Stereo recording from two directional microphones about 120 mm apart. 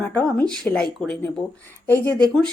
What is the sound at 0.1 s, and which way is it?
A woman's voice, 10° left (ahead or behind).